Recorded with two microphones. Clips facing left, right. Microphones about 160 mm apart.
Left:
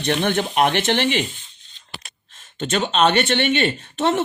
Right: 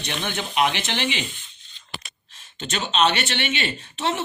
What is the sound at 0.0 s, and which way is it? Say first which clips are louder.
Speech: left 9 dB; 55° left (ahead or behind).